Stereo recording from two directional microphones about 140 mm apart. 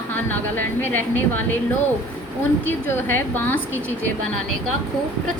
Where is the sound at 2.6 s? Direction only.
15° left (ahead or behind).